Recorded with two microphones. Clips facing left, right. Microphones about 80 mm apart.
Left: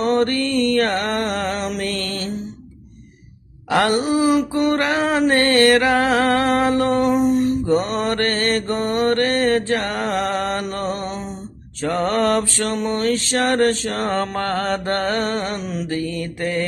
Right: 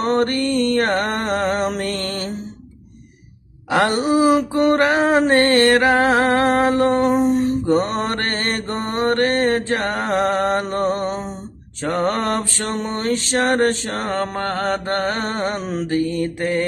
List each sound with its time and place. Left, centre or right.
0.0 s music: right
3.7 s a sound: right
11.8 s mantra: right
15.9 s mantra: right